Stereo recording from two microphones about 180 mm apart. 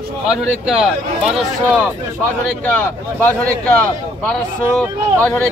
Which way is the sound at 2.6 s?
10° left (ahead or behind).